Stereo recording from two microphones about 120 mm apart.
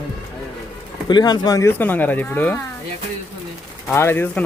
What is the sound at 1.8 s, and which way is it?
Speech, 15° left (ahead or behind).